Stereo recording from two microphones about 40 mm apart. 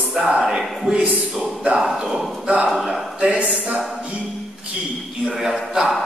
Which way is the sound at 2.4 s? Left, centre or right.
Right.